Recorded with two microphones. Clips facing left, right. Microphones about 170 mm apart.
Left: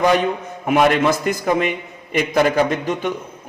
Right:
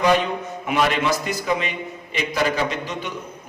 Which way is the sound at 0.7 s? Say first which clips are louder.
Left 5 dB; 50° left (ahead or behind).